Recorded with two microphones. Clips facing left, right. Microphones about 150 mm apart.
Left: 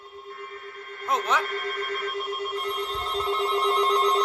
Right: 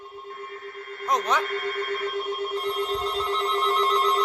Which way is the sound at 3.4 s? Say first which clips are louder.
Left 1 dB; 10° left (ahead or behind).